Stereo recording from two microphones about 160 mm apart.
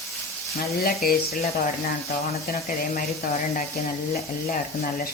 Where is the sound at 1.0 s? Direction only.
70° left (ahead or behind).